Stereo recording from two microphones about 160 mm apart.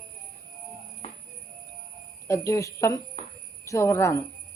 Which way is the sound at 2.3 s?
20° left (ahead or behind).